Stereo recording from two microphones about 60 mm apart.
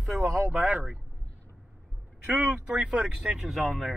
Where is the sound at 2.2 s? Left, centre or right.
Right.